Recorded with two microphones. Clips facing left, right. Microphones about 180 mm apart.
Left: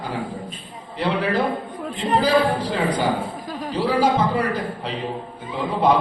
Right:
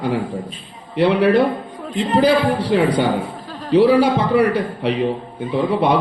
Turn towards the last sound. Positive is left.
turn(degrees=-65)  # may be behind; listen again after turning